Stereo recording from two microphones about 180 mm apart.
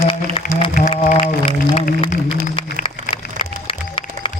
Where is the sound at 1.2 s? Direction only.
30° left (ahead or behind).